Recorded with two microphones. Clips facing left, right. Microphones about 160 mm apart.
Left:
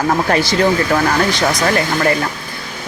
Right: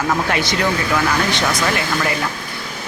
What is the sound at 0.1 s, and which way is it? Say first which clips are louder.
Speech: left 4 dB; 35° left (ahead or behind).